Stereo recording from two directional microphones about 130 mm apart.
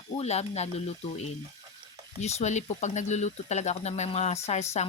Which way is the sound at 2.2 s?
60° left (ahead or behind).